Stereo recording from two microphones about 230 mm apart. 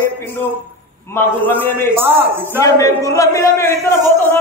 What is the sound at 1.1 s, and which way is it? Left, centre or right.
Speech, centre.